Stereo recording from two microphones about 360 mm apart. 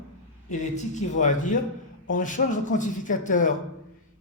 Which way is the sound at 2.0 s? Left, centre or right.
Left.